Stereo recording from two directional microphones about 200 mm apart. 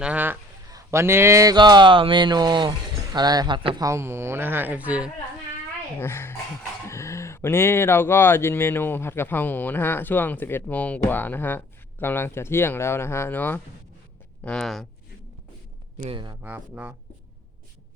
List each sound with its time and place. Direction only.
0.0 s speech: 5° right (ahead or behind); by 3.8 s 25° right (ahead or behind)
3.8 s speech: 15° right (ahead or behind)
6.0 s speech: 10° left (ahead or behind)
16.0 s speech: 25° right (ahead or behind)
16.4 s speech: 5° right (ahead or behind)